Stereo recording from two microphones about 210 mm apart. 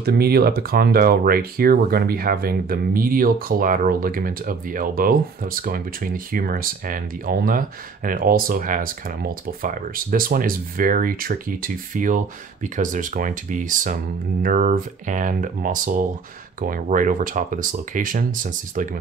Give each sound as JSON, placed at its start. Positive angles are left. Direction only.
{"t": 0.0, "sound": "speech", "side_deg": -50}